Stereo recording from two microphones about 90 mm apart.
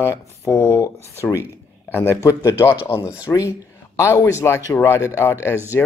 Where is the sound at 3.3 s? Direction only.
35° left (ahead or behind).